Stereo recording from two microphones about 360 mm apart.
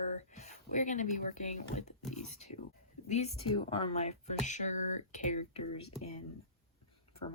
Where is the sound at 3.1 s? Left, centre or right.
Centre.